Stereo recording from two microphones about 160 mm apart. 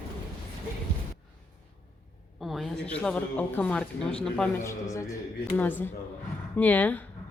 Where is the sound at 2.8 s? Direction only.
10° left (ahead or behind).